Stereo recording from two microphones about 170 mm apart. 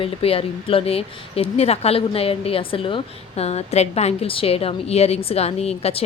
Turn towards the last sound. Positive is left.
turn(degrees=35)  # may be behind; listen again after turning